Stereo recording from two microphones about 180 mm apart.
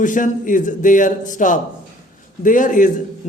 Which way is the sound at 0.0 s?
45° left (ahead or behind).